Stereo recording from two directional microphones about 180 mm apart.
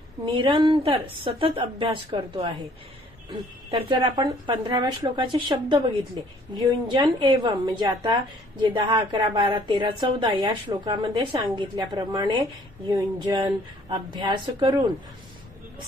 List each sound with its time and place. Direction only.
0.2 s a woman's voice: 25° right (ahead or behind)
4.0 s a woman's voice: 25° right (ahead or behind)